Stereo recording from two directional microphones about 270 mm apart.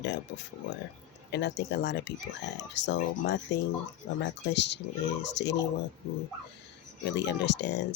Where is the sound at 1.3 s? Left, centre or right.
Left.